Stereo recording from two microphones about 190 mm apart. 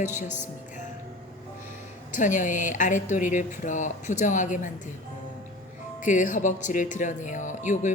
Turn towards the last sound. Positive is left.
turn(degrees=40)  # may be behind; listen again after turning